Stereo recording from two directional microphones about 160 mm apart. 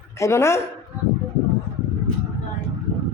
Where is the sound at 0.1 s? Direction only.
20° left (ahead or behind).